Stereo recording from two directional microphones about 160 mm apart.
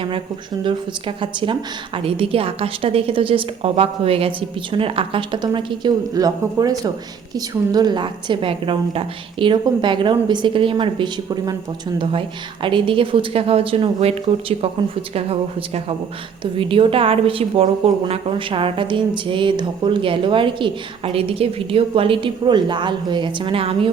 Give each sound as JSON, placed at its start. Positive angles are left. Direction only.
{"t": 0.6, "sound": "a woman's voice", "side_deg": -30}
{"t": 12.6, "sound": "a woman's voice", "side_deg": -30}